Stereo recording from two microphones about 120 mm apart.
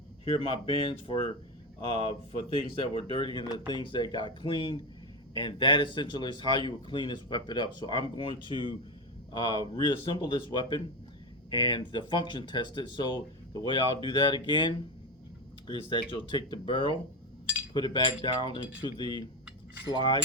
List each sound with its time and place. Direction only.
0.3 s speech: 50° left (ahead or behind)